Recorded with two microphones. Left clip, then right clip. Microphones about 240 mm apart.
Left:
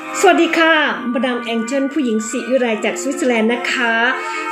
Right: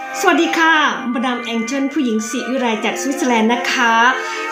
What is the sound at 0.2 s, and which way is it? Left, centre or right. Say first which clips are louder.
A woman's voice: left 2 dB; right.